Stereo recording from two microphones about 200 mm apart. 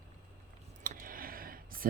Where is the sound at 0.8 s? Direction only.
45° right (ahead or behind).